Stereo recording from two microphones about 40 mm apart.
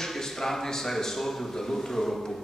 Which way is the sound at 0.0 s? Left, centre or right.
Centre.